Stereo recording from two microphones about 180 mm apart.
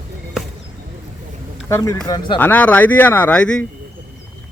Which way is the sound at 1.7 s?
15° left (ahead or behind).